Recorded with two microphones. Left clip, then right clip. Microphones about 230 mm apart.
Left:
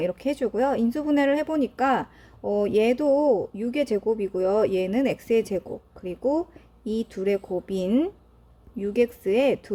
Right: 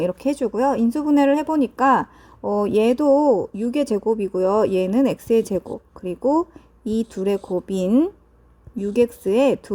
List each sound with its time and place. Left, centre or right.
0.0 s speech: centre